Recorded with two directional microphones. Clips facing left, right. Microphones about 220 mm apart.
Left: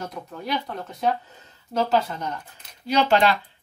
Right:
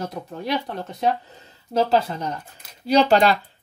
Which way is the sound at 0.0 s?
30° right (ahead or behind).